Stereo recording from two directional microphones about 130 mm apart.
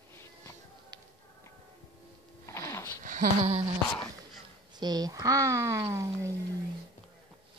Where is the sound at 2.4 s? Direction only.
25° left (ahead or behind).